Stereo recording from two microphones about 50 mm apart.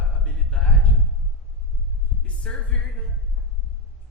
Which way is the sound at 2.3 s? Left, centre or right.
Left.